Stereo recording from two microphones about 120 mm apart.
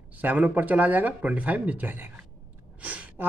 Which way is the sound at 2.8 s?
10° right (ahead or behind).